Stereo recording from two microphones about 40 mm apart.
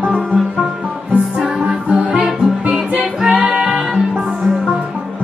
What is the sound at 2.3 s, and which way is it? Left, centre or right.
Music, centre.